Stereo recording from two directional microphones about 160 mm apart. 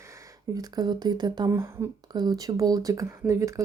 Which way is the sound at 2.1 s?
25° right (ahead or behind).